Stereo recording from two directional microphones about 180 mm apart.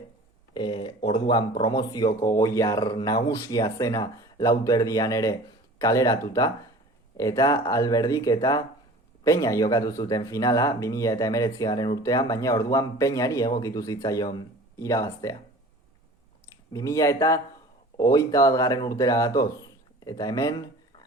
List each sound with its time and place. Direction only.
0.5 s speech: 25° left (ahead or behind)
16.7 s speech: 20° left (ahead or behind)